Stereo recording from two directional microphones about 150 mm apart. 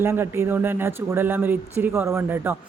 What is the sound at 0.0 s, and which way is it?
Speech, 15° right (ahead or behind).